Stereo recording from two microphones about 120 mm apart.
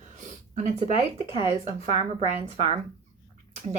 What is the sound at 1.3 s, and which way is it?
Speech, 50° left (ahead or behind).